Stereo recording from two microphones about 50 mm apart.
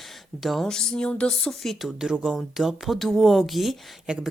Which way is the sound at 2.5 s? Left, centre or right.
Centre.